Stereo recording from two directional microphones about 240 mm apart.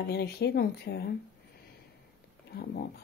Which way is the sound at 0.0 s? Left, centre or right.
Left.